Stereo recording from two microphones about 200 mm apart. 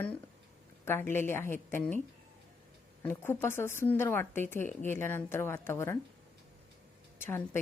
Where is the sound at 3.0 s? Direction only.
10° left (ahead or behind).